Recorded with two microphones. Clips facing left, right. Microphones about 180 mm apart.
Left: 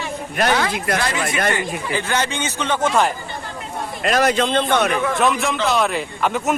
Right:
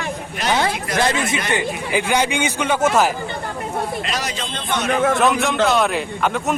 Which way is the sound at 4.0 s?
55° left (ahead or behind).